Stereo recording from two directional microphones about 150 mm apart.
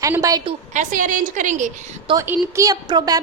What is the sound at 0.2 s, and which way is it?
Speech, 25° right (ahead or behind).